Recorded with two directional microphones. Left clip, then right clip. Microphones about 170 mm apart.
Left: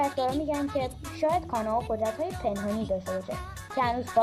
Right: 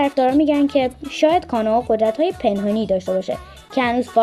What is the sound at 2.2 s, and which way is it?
Speech, 15° right (ahead or behind).